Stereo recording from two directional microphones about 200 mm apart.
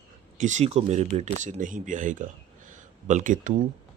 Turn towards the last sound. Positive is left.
turn(degrees=-40)  # may be behind; listen again after turning